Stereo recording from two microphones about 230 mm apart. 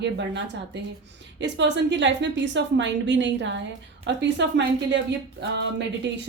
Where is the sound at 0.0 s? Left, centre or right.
Right.